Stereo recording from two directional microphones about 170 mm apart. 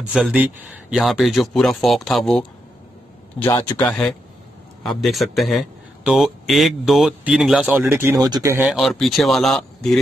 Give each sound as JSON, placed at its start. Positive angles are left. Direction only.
{"t": 0.1, "sound": "a man's voice", "side_deg": -10}
{"t": 3.3, "sound": "a man's voice", "side_deg": 15}
{"t": 8.6, "sound": "a man's voice", "side_deg": 0}